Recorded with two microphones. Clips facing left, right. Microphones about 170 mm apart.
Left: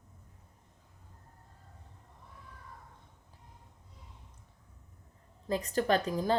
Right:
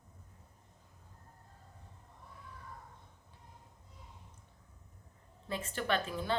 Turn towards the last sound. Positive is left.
turn(degrees=40)  # may be behind; listen again after turning